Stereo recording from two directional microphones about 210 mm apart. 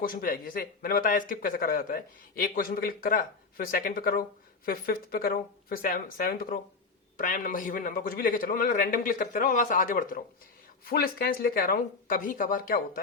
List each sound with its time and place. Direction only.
0.0 s a man's voice: 45° left (ahead or behind)